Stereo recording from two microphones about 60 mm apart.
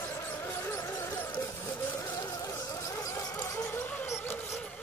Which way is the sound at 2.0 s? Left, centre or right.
Left.